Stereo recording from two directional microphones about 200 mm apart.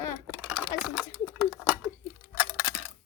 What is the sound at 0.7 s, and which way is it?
Speech, 20° left (ahead or behind).